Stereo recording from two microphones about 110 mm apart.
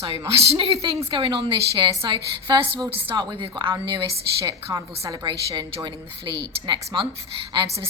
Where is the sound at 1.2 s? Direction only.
55° right (ahead or behind).